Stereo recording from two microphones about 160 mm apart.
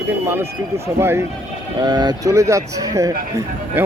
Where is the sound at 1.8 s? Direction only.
25° right (ahead or behind).